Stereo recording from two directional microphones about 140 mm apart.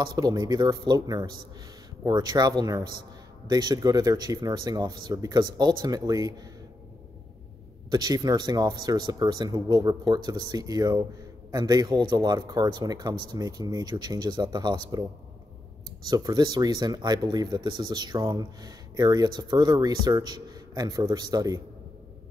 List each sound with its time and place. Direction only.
0.0 s speech: 25° right (ahead or behind)
7.9 s speech: 30° right (ahead or behind)
16.1 s speech: 30° right (ahead or behind)